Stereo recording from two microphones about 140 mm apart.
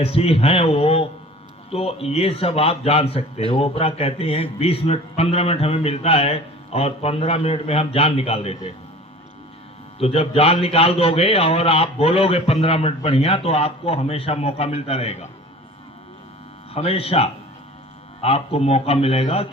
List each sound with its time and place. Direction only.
0.0 s a man's voice: 45° left (ahead or behind)
10.0 s a man's voice: 45° left (ahead or behind)
16.7 s a man's voice: 45° left (ahead or behind)